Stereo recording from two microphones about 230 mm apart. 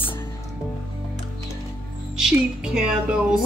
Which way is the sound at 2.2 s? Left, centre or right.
Centre.